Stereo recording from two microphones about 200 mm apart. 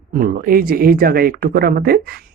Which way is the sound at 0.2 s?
45° right (ahead or behind).